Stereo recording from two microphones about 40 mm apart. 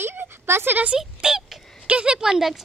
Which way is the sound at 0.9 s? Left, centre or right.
Centre.